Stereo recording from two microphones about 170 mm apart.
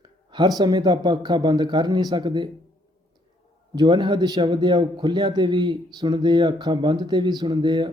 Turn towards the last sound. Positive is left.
turn(degrees=-25)  # may be behind; listen again after turning